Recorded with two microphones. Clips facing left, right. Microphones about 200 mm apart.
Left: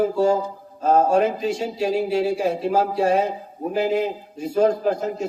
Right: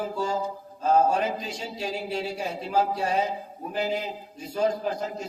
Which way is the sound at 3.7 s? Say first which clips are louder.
Left 7 dB; 50° left (ahead or behind).